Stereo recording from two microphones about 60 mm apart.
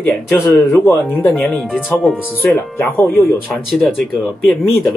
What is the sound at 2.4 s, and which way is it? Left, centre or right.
Speech, left.